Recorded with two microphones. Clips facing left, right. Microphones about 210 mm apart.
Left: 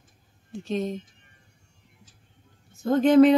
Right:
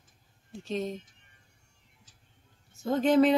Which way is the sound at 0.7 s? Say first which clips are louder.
Left 4 dB; centre (ahead or behind).